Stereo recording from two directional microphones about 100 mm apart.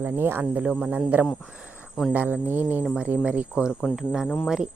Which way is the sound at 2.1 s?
15° right (ahead or behind).